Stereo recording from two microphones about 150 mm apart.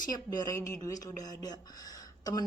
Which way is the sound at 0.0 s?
25° left (ahead or behind).